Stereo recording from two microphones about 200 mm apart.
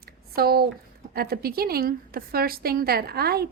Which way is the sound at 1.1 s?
50° right (ahead or behind).